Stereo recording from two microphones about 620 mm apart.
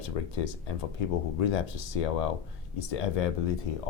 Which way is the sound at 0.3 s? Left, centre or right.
Left.